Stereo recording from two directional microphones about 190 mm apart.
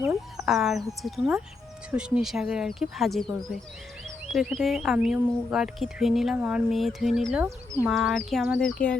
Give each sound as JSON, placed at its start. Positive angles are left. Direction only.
{"t": 0.3, "sound": "speech", "side_deg": 0}
{"t": 4.3, "sound": "speech", "side_deg": 0}
{"t": 7.4, "sound": "speech", "side_deg": -15}
{"t": 7.9, "sound": "speech", "side_deg": 0}